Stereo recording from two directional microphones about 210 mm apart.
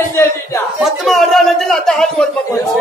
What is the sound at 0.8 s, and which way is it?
A man's voice, centre (ahead or behind).